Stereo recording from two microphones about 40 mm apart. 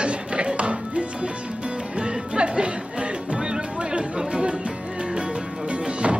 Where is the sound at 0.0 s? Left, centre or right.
Right.